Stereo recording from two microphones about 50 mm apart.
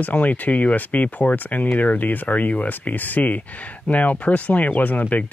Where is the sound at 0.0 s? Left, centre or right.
Left.